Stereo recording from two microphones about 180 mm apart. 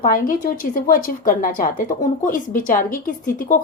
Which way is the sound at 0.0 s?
50° left (ahead or behind).